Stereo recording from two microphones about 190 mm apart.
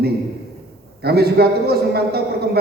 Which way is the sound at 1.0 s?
55° right (ahead or behind).